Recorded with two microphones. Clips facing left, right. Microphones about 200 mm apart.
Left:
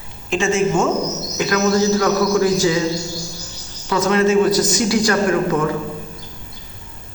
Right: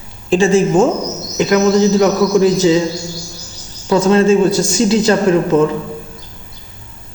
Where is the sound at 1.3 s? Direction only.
20° right (ahead or behind).